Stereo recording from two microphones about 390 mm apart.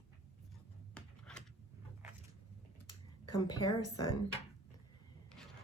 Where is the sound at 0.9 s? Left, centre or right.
Centre.